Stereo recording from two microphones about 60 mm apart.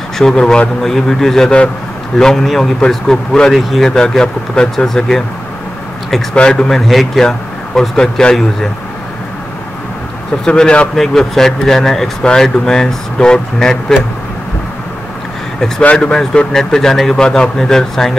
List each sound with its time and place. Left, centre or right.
0.2 s speech: centre
6.3 s speech: centre
6.7 s speech: centre
10.4 s speech: centre
11.0 s speech: centre
15.8 s speech: centre